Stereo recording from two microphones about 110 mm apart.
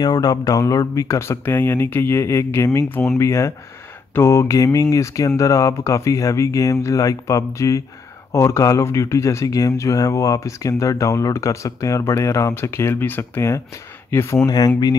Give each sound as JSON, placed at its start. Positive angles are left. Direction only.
{"t": 0.0, "sound": "speech", "side_deg": 35}